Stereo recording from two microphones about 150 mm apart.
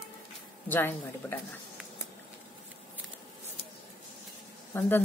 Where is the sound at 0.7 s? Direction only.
15° left (ahead or behind).